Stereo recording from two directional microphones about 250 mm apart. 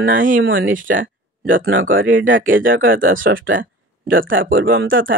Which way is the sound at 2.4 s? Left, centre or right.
Right.